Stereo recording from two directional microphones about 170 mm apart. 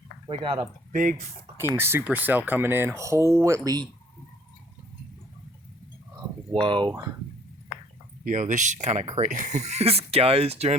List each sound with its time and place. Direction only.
0.3 s speech: 30° right (ahead or behind)
1.7 s speech: 15° right (ahead or behind)
6.5 s speech: 30° right (ahead or behind)
8.2 s speech: 50° right (ahead or behind)